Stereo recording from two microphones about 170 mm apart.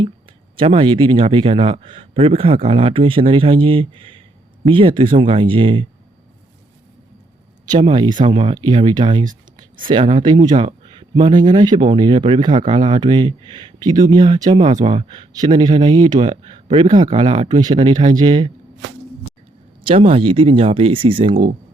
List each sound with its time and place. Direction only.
0.6 s a man's voice: 35° right (ahead or behind)
7.8 s speech: 30° right (ahead or behind)
12.5 s speech: 40° right (ahead or behind)
13.0 s speech: 25° right (ahead or behind)
14.8 s a man's voice: 35° right (ahead or behind)
19.8 s a man's voice: 30° right (ahead or behind)